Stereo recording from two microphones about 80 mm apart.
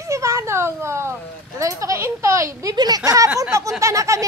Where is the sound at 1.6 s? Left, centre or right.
Right.